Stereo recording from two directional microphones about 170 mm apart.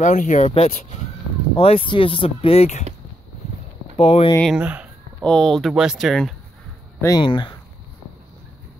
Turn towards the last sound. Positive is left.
turn(degrees=30)  # may be behind; listen again after turning